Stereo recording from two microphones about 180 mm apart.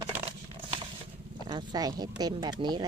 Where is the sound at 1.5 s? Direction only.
20° right (ahead or behind).